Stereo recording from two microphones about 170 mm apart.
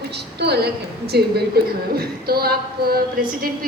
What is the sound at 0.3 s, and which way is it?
A woman's voice, 75° right (ahead or behind).